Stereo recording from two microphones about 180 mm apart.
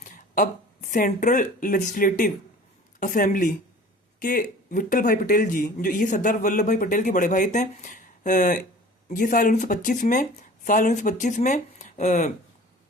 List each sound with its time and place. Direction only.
0.0 s speech: 45° left (ahead or behind)